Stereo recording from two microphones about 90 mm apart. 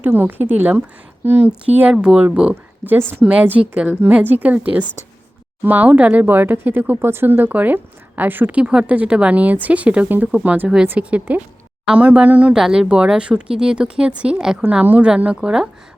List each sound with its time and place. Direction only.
0.0 s speech: 20° right (ahead or behind)
1.9 s speech: 10° right (ahead or behind)